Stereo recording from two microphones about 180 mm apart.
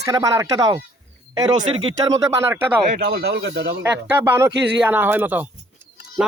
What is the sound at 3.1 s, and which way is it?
Speech, 70° right (ahead or behind).